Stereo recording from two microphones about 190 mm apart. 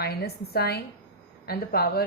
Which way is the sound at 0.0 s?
55° left (ahead or behind).